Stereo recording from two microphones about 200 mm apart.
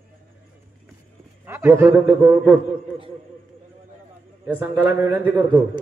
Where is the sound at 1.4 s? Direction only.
10° right (ahead or behind).